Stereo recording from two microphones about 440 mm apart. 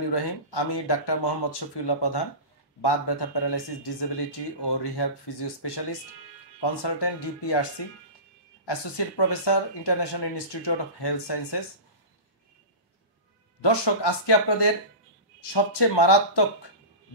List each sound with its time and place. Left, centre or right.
0.1 s speech: left
8.6 s speech: left
13.6 s speech: left